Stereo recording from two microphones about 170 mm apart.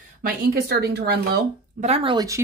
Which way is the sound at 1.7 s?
40° right (ahead or behind).